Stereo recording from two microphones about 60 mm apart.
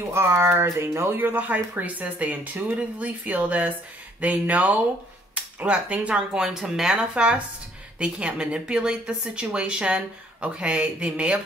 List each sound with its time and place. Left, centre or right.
0.1 s speech: right; by 11.4 s centre